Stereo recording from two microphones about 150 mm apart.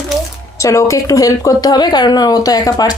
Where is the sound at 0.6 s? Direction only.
20° left (ahead or behind).